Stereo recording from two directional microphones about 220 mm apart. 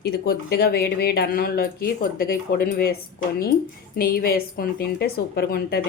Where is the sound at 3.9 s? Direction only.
40° left (ahead or behind).